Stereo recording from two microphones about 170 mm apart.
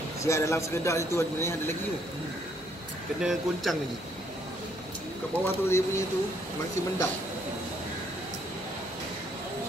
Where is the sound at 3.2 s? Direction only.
5° right (ahead or behind).